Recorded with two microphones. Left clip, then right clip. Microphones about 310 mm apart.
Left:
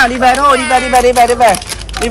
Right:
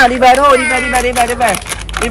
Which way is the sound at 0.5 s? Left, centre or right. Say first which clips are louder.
Left 2 dB; centre.